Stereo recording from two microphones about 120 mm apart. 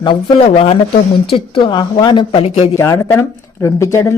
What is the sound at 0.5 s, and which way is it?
Speech, 55° left (ahead or behind).